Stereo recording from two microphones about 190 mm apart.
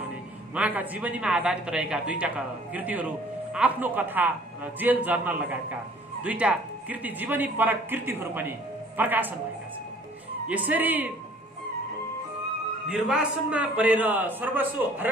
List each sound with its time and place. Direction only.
0.6 s speech: 10° right (ahead or behind)
10.5 s speech: 10° right (ahead or behind)
12.8 s speech: 5° right (ahead or behind)